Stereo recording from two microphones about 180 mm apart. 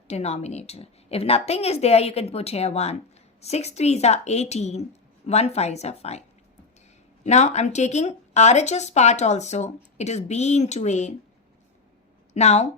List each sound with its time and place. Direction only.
0.1 s speech: 35° left (ahead or behind)
7.3 s speech: 40° left (ahead or behind)
12.3 s speech: 40° left (ahead or behind)